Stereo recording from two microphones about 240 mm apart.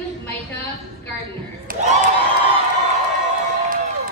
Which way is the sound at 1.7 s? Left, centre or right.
Right.